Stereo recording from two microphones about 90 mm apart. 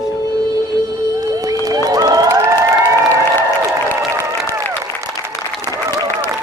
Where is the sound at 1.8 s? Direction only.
45° right (ahead or behind).